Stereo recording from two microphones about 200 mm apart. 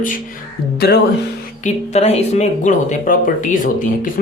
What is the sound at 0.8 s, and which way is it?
Speech, 55° left (ahead or behind).